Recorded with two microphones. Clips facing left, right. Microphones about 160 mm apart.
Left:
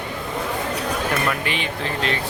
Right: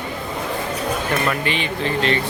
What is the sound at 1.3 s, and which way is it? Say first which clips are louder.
Speech: right 2 dB; centre (ahead or behind).